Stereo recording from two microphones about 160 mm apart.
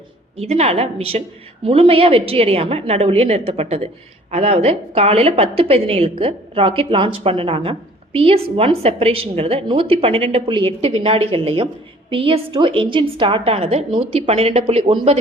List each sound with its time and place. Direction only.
0.3 s a woman's voice: 40° right (ahead or behind)